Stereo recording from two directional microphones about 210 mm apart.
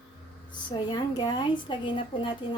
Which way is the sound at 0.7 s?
20° left (ahead or behind).